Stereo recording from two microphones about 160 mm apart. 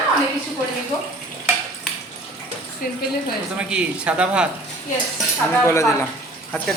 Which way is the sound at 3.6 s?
5° right (ahead or behind).